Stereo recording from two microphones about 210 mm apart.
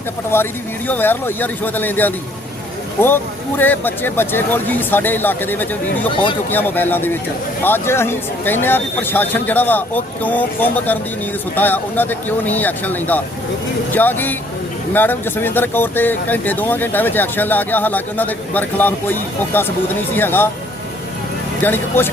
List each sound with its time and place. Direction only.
0.3 s speech: 10° left (ahead or behind)
3.6 s speech: 10° left (ahead or behind)
21.6 s speech: 10° left (ahead or behind)